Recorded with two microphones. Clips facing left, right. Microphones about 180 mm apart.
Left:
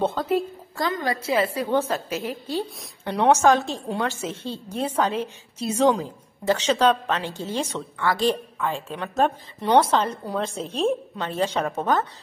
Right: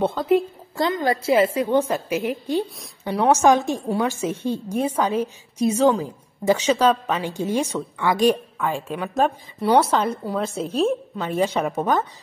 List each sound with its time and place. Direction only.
0.0 s a woman's voice: 10° right (ahead or behind)
0.7 s a woman's voice: 25° right (ahead or behind); by 12.1 s 10° right (ahead or behind)